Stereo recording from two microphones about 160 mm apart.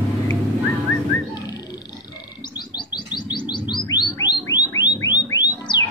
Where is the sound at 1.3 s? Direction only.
25° left (ahead or behind).